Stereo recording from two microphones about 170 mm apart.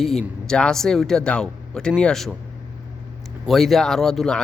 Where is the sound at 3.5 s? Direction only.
Centre (ahead or behind).